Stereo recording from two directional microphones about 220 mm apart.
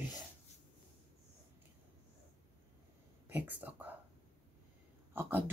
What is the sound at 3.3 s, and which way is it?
Speech, 10° right (ahead or behind).